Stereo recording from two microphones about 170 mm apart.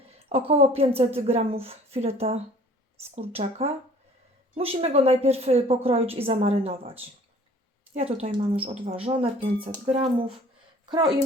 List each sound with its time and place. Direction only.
0.3 s a woman's voice: 35° right (ahead or behind)